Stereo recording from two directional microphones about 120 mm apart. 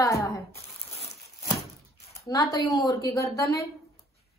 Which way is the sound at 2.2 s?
30° left (ahead or behind).